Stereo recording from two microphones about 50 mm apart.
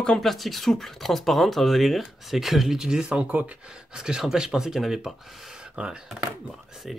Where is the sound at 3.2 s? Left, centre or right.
Right.